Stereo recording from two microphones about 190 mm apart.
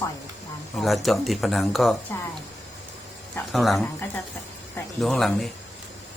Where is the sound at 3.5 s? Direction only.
Centre (ahead or behind).